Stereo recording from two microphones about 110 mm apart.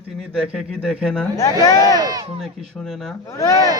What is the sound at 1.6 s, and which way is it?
Speech, 30° left (ahead or behind).